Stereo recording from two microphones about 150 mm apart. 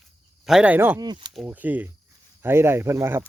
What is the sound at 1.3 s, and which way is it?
Speech, centre (ahead or behind).